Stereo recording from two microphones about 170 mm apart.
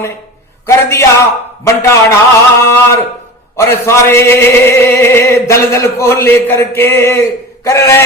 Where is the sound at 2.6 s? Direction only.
15° left (ahead or behind).